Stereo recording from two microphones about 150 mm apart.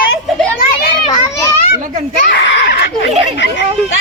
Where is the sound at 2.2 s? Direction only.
90° left.